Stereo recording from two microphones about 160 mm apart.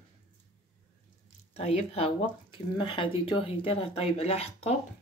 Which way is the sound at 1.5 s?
40° left (ahead or behind).